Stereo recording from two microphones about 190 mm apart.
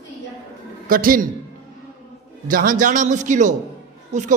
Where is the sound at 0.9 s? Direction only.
50° right (ahead or behind).